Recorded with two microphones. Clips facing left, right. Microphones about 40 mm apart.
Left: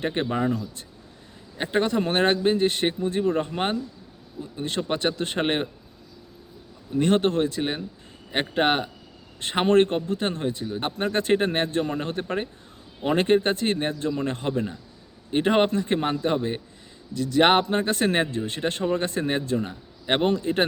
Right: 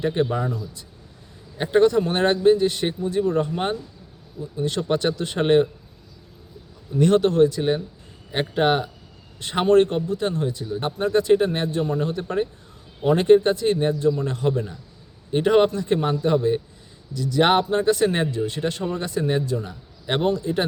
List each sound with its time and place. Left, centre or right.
0.0 s speech: left
1.9 s speech: left
4.8 s speech: centre
5.1 s speech: left
6.9 s speech: left
17.2 s speech: left